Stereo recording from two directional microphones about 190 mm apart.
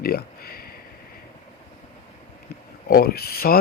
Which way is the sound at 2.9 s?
55° left (ahead or behind).